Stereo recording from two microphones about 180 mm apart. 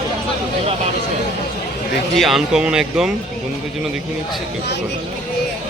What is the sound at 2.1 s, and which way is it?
Speech, centre (ahead or behind).